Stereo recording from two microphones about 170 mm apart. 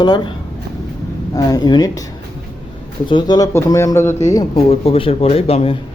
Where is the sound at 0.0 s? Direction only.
25° left (ahead or behind).